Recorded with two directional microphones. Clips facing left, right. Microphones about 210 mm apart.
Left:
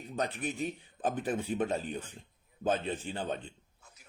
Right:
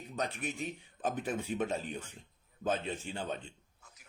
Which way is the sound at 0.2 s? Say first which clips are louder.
Left 3 dB; 35° left (ahead or behind).